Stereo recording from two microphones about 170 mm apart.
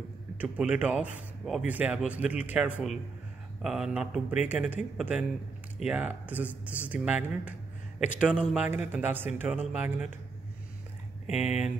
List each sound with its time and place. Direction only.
0.4 s speech: 10° right (ahead or behind)
11.3 s speech: 40° left (ahead or behind)